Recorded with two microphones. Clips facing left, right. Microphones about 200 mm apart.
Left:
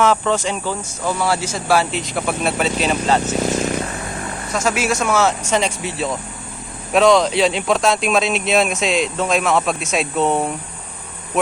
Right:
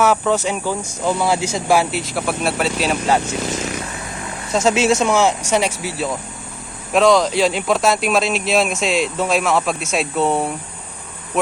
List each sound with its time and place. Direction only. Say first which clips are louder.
0.0 s speech: even; 10° right (ahead or behind)
4.5 s speech: right 4 dB; 25° right (ahead or behind); by 10.5 s 5° right (ahead or behind)